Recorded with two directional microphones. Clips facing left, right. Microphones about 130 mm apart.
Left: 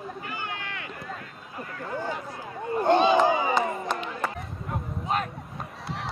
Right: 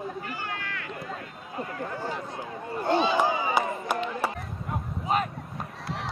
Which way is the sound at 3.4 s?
10° right (ahead or behind).